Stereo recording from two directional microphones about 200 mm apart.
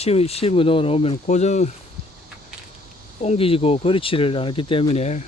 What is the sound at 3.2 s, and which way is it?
Speech, 30° left (ahead or behind).